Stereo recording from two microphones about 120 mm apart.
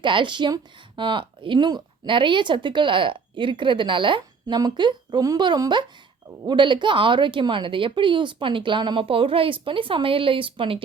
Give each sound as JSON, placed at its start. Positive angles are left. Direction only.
{"t": 0.0, "sound": "speech", "side_deg": -40}